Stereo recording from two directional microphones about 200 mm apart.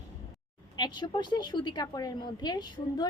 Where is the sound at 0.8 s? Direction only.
20° left (ahead or behind).